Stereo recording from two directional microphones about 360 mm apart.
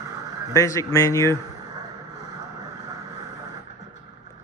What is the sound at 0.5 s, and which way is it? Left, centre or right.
Speech, centre.